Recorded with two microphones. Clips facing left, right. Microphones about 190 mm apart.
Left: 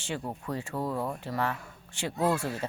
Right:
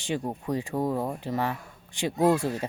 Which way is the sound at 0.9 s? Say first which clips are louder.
Right 1 dB; 40° right (ahead or behind).